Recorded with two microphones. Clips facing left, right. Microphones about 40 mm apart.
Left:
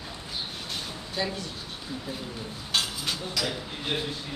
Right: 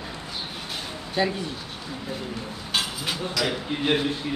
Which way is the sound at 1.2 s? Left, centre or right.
Right.